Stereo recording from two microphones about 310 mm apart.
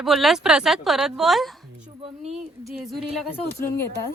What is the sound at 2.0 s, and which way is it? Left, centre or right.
Speech, centre.